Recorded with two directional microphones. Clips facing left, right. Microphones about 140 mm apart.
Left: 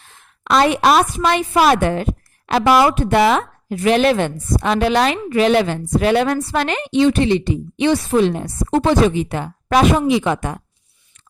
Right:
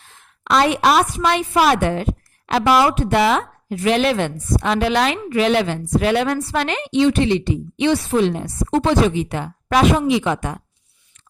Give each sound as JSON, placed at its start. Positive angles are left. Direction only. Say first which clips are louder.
{"t": 0.4, "sound": "a woman's voice", "louder": "left 2 dB", "side_deg": 50}